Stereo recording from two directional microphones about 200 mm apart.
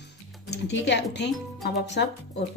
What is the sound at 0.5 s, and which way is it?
A woman's voice, 60° left (ahead or behind).